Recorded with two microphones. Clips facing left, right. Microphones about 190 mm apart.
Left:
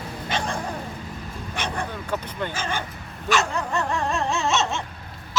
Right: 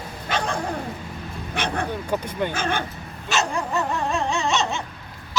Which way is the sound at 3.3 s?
20° right (ahead or behind).